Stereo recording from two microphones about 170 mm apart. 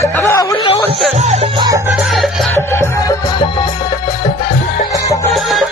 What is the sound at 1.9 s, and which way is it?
Music, centre (ahead or behind).